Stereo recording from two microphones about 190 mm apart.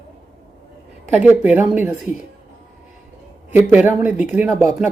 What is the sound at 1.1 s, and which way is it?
Speech, 10° right (ahead or behind).